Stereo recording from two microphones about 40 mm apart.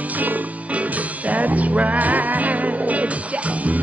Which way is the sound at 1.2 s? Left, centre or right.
Right.